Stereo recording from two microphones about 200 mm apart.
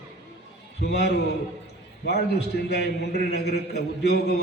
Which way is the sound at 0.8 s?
55° left (ahead or behind).